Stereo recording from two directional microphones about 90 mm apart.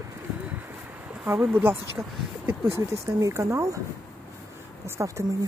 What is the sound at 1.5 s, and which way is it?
Speech, 25° right (ahead or behind).